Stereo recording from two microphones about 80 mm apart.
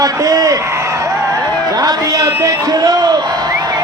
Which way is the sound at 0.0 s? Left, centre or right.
Right.